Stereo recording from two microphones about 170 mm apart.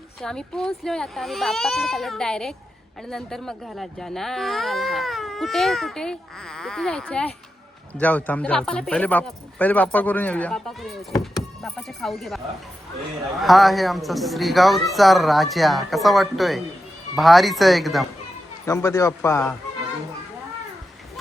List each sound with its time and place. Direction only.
0.2 s speech: 5° left (ahead or behind)
13.4 s speech: centre (ahead or behind)
18.6 s speech: 15° left (ahead or behind)